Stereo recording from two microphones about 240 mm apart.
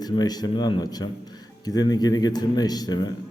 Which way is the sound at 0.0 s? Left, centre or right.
Centre.